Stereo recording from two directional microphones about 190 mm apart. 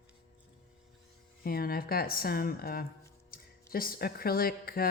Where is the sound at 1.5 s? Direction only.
50° left (ahead or behind).